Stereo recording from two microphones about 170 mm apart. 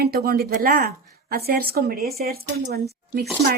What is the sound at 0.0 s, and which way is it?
A woman's voice, 65° right (ahead or behind).